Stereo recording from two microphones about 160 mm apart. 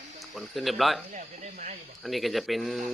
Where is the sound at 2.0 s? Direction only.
Centre (ahead or behind).